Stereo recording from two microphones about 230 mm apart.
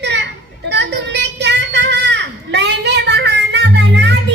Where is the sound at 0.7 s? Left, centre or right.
Right.